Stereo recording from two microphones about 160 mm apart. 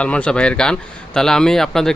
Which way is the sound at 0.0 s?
5° left (ahead or behind).